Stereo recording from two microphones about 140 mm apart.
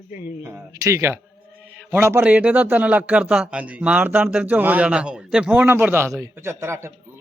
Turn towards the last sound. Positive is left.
turn(degrees=-20)  # may be behind; listen again after turning